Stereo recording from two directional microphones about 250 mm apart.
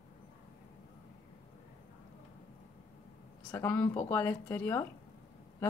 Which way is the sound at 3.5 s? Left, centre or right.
Centre.